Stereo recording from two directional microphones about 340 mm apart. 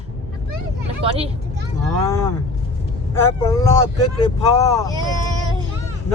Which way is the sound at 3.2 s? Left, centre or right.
Centre.